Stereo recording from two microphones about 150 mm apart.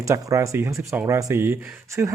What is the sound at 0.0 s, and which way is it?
Speech, 20° right (ahead or behind).